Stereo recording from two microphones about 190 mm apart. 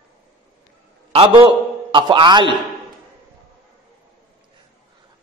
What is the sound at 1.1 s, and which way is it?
A man's voice, 25° right (ahead or behind).